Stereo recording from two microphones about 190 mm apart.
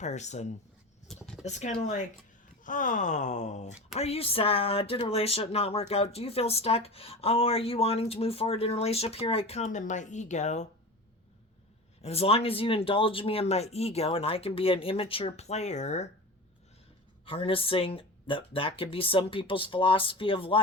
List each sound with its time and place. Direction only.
0.0 s speech: 35° left (ahead or behind)
1.0 s a sound: centre (ahead or behind)
1.5 s speech: 40° left (ahead or behind)
12.0 s speech: 30° left (ahead or behind)
17.2 s speech: 30° left (ahead or behind)